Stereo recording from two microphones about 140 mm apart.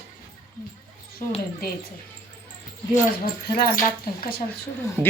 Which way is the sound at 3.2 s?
90° left.